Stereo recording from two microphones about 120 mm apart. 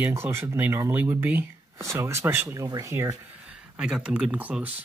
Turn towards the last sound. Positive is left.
turn(degrees=-15)  # may be behind; listen again after turning